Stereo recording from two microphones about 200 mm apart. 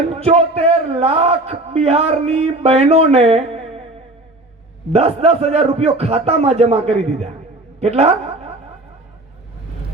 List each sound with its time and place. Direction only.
0.1 s a man's voice: 30° right (ahead or behind)
4.9 s a man's voice: 30° right (ahead or behind)